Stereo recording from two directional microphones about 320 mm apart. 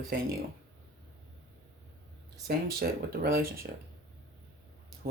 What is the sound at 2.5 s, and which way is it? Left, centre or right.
Speech, right.